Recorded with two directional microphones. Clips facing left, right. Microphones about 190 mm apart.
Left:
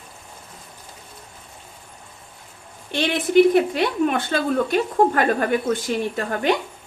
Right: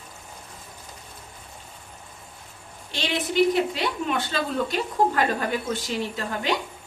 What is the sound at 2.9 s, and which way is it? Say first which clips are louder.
A woman's voice: left 8 dB; 55° left (ahead or behind).